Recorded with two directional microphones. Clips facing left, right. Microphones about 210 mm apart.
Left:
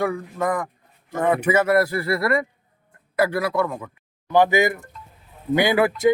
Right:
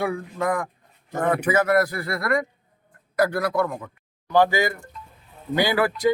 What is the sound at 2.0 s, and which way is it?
Speech, 5° left (ahead or behind).